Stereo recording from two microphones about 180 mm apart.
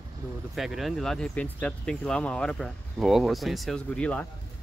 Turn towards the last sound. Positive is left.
turn(degrees=5)  # may be behind; listen again after turning